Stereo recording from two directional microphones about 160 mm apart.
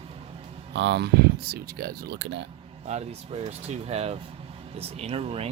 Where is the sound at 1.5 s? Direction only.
70° right (ahead or behind).